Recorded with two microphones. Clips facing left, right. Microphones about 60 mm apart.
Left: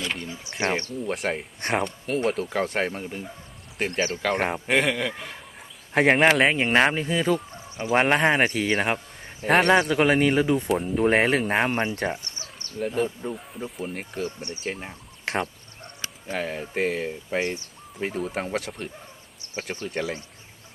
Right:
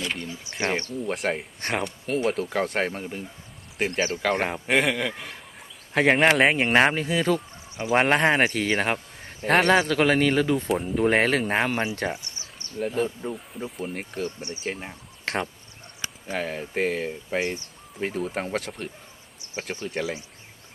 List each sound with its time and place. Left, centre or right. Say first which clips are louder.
0.3 s speech: left 2 dB; left
0.9 s speech: right 1 dB; centre
9.8 s a man's voice: left 1 dB; centre
10.5 s speech: left 1 dB; centre
16.3 s speech: even; centre